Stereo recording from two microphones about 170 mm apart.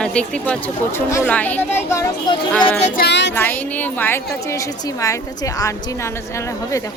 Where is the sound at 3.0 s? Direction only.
90° left.